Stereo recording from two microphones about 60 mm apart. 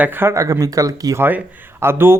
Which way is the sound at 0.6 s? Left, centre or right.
Right.